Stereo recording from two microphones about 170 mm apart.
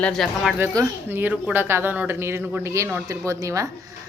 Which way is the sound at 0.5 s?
15° right (ahead or behind).